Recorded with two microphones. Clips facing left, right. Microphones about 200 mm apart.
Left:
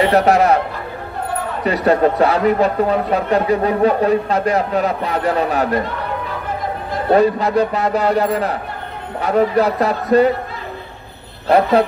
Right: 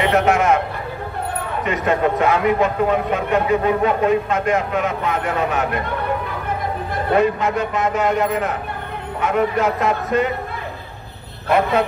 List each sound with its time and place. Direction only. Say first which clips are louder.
0.0 s a man's voice: left 3 dB; 35° left (ahead or behind)
1.6 s a man's voice: left 5 dB; 35° left (ahead or behind)
7.1 s a man's voice: left 4 dB; 35° left (ahead or behind)
11.4 s a man's voice: left 4 dB; 35° left (ahead or behind)